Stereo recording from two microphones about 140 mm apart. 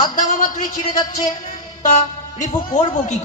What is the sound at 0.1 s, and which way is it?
Speech, 70° left (ahead or behind).